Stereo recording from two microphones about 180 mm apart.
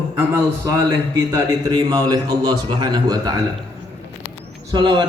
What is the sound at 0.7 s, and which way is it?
A man's voice, 20° right (ahead or behind).